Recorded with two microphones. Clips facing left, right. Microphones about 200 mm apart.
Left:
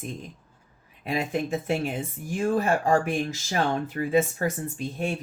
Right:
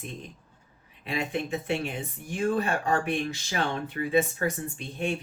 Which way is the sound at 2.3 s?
40° left (ahead or behind).